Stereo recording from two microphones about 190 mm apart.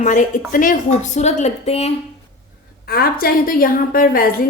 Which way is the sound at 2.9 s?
50° left (ahead or behind).